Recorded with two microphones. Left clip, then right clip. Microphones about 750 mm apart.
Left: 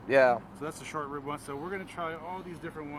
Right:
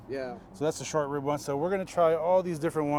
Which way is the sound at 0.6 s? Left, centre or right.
Right.